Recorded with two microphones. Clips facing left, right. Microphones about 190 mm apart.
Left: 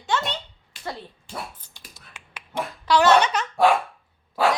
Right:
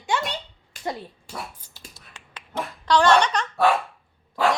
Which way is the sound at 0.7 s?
45° right (ahead or behind).